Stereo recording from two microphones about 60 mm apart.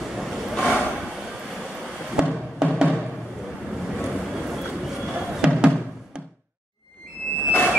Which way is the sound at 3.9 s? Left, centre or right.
Centre.